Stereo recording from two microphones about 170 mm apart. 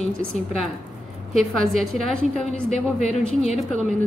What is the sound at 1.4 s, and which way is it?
A woman's voice, centre (ahead or behind).